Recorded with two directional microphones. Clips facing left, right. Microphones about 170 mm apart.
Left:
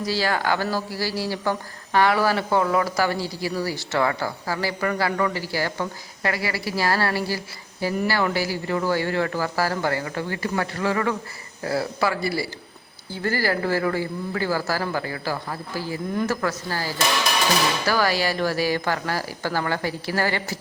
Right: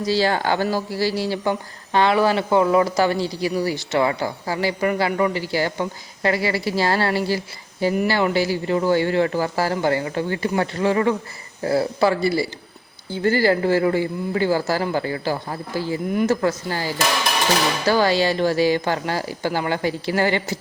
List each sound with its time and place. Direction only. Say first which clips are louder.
0.0 s speech: right 4 dB; 25° right (ahead or behind)